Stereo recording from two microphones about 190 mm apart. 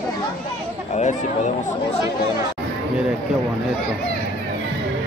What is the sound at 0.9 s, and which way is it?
Speech, 40° left (ahead or behind).